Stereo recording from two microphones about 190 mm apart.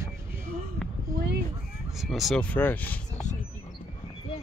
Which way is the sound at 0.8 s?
Centre (ahead or behind).